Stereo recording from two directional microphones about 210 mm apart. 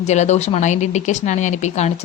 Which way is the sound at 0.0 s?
35° left (ahead or behind).